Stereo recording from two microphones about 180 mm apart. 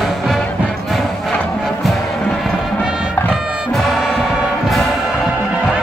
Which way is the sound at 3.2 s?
Centre (ahead or behind).